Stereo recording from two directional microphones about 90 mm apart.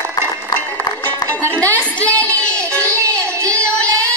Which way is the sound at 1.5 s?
15° left (ahead or behind).